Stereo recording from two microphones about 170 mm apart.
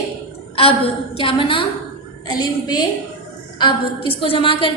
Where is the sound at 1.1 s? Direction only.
30° left (ahead or behind).